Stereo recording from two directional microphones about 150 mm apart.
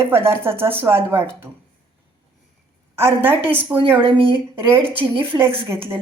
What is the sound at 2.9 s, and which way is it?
Speech, 15° right (ahead or behind).